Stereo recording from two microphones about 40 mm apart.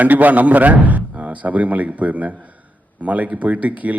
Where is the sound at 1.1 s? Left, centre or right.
Right.